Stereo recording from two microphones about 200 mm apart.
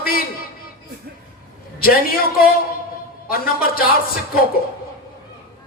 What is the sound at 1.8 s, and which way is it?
A woman's voice, 50° left (ahead or behind).